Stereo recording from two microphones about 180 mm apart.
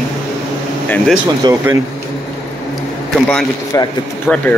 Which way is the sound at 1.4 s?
20° right (ahead or behind).